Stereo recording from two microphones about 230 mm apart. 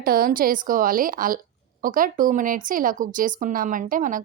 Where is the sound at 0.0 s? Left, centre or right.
Right.